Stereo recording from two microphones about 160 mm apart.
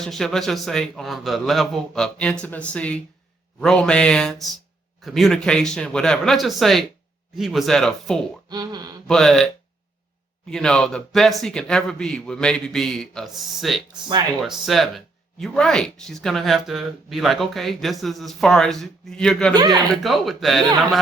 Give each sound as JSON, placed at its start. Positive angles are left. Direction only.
{"t": 0.0, "sound": "speech", "side_deg": 0}
{"t": 8.4, "sound": "a sound", "side_deg": -25}
{"t": 9.0, "sound": "speech", "side_deg": 5}
{"t": 10.5, "sound": "speech", "side_deg": 5}
{"t": 19.5, "sound": "a sound", "side_deg": -25}
{"t": 19.9, "sound": "speech", "side_deg": 0}